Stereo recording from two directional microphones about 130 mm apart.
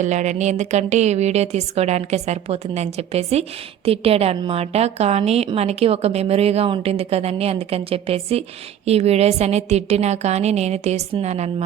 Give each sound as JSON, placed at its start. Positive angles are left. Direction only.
{"t": 0.0, "sound": "a woman's voice", "side_deg": -65}